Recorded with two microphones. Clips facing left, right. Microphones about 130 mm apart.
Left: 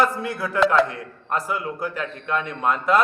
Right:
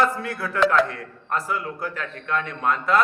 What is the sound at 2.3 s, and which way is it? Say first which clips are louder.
Speech: left 1 dB; 20° left (ahead or behind).